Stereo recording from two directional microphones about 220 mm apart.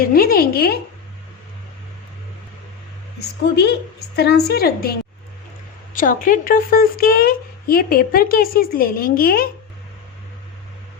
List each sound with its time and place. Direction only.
0.0 s a woman's voice: 40° left (ahead or behind)
3.5 s a woman's voice: 50° left (ahead or behind)